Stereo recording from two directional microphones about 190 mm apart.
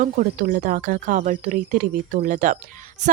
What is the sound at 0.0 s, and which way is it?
Speech, 40° right (ahead or behind).